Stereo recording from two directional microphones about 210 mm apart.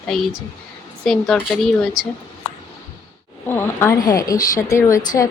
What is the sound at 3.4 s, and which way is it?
Speech, 10° left (ahead or behind).